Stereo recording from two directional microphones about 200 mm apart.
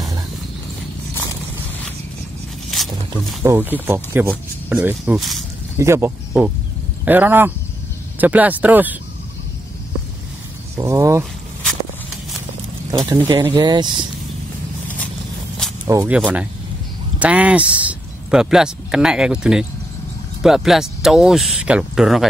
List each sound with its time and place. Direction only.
3.4 s speech: 10° right (ahead or behind)
5.8 s speech: 10° right (ahead or behind)
10.8 s speech: 15° right (ahead or behind)
12.9 s speech: 20° right (ahead or behind)
15.9 s speech: 15° right (ahead or behind)